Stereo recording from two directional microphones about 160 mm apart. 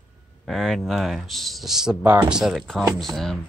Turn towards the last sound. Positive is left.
turn(degrees=0)  # may be behind; listen again after turning